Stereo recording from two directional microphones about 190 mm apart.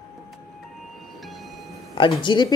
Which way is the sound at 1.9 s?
25° left (ahead or behind).